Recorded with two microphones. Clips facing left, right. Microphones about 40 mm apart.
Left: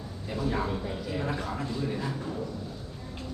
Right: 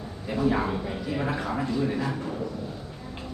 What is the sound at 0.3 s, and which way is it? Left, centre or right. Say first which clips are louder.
A man's voice: right 5 dB; right.